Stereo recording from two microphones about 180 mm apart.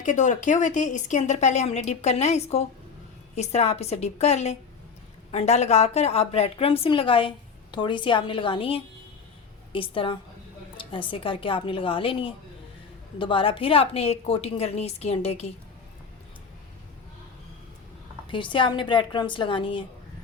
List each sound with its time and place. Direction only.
0.0 s a woman's voice: 45° left (ahead or behind)
18.3 s a woman's voice: 25° left (ahead or behind)